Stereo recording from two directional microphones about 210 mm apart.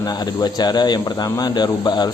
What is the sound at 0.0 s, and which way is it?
A man's voice, 20° left (ahead or behind).